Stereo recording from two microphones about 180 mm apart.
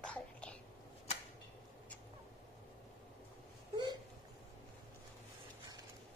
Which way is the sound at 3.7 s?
25° right (ahead or behind).